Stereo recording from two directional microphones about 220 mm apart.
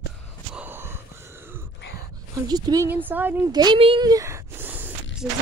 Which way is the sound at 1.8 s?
50° left (ahead or behind).